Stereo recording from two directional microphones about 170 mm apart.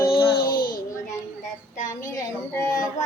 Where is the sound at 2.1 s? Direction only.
20° left (ahead or behind).